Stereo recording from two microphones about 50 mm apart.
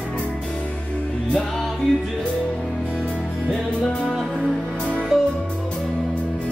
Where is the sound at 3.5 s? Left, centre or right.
Centre.